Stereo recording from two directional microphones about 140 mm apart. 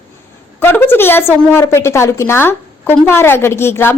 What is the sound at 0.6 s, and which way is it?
Speech, 15° left (ahead or behind).